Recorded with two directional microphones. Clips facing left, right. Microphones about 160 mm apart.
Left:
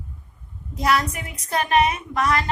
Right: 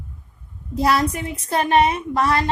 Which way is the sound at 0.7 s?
30° right (ahead or behind).